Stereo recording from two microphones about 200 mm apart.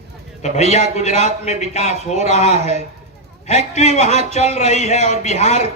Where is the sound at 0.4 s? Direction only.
35° left (ahead or behind).